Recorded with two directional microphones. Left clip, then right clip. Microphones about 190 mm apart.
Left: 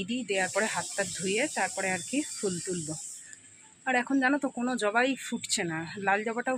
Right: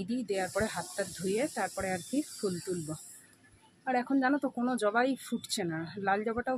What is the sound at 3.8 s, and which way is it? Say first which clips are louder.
Speech: left 3 dB; 5° left (ahead or behind).